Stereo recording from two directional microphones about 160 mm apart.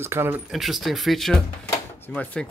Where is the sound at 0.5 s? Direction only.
Centre (ahead or behind).